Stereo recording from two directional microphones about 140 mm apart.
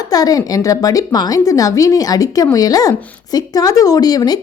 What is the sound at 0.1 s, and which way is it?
A woman's voice, 25° left (ahead or behind).